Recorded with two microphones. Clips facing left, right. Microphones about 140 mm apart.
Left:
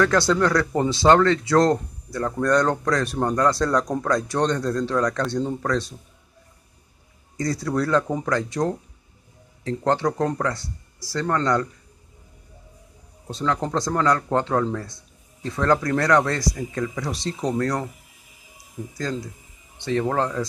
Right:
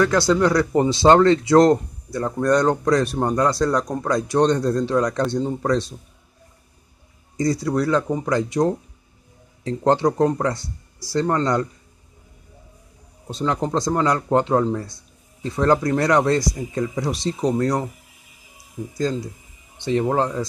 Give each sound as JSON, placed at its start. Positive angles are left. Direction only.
{"t": 0.0, "sound": "speech", "side_deg": -10}
{"t": 7.3, "sound": "speech", "side_deg": -15}
{"t": 13.3, "sound": "speech", "side_deg": -20}
{"t": 19.8, "sound": "speech", "side_deg": -20}